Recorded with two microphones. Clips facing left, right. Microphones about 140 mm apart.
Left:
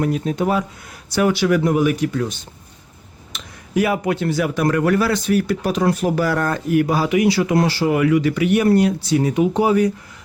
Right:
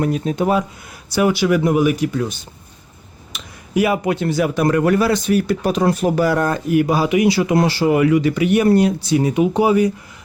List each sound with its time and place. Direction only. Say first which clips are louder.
0.0 s speech: right 1 dB; 25° right (ahead or behind)
1.1 s speech: right 1 dB; 10° right (ahead or behind)